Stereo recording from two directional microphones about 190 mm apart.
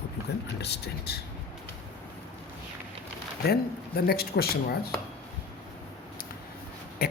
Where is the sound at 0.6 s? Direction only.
60° left (ahead or behind).